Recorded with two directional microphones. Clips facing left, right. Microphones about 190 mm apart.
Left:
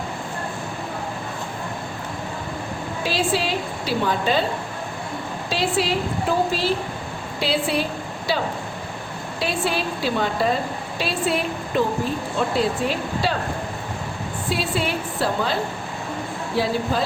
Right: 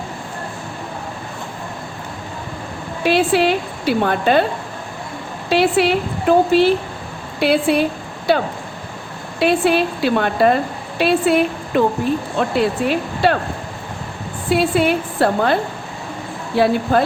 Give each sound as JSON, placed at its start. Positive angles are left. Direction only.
{"t": 3.0, "sound": "a woman's voice", "side_deg": -60}
{"t": 5.5, "sound": "a woman's voice", "side_deg": -60}
{"t": 14.5, "sound": "a woman's voice", "side_deg": -60}
{"t": 16.6, "sound": "a woman's voice", "side_deg": -60}